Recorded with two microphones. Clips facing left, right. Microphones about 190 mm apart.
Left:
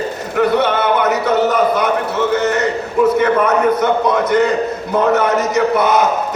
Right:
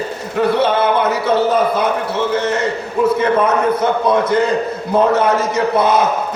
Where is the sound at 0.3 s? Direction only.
30° right (ahead or behind).